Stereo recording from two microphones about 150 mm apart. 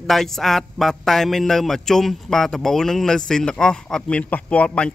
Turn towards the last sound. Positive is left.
turn(degrees=5)  # may be behind; listen again after turning